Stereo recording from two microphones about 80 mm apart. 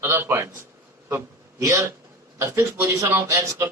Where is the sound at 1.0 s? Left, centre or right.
Right.